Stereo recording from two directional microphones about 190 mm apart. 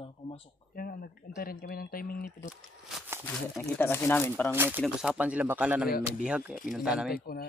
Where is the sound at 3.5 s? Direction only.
10° left (ahead or behind).